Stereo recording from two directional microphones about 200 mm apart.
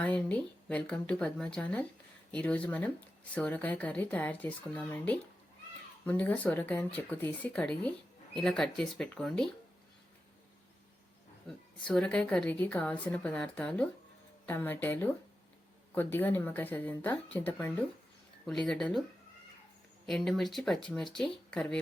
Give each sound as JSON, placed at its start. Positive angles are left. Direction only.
{"t": 0.0, "sound": "speech", "side_deg": 5}
{"t": 11.4, "sound": "speech", "side_deg": 5}
{"t": 20.1, "sound": "speech", "side_deg": 0}